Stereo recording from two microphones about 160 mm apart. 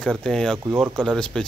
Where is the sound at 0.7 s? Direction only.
15° right (ahead or behind).